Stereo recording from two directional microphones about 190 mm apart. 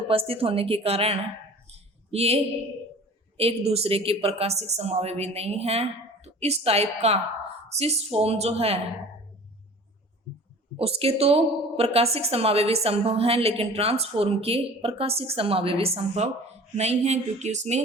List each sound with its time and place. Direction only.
0.1 s a woman's voice: 30° right (ahead or behind)
1.7 s a sound: 35° right (ahead or behind)
3.3 s a woman's voice: 30° right (ahead or behind)
10.8 s a woman's voice: 30° right (ahead or behind)